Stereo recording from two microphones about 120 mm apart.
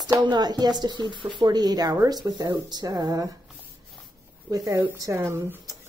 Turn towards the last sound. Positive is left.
turn(degrees=-25)  # may be behind; listen again after turning